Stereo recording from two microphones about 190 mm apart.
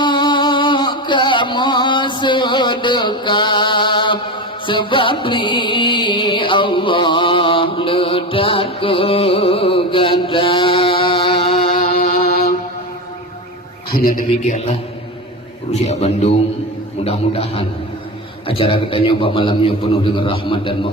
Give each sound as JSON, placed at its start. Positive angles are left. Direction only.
{"t": 0.0, "sound": "music", "side_deg": 25}
{"t": 11.8, "sound": "music", "side_deg": 45}
{"t": 13.9, "sound": "a man's voice", "side_deg": 50}
{"t": 14.4, "sound": "a man's voice", "side_deg": 35}